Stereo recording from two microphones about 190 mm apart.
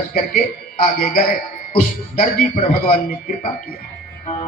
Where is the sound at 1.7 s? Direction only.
50° left (ahead or behind).